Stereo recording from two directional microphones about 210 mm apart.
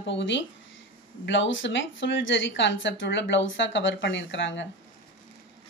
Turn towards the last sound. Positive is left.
turn(degrees=60)  # may be behind; listen again after turning